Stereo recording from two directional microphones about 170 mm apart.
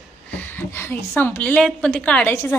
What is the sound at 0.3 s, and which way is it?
A woman's voice, 15° left (ahead or behind).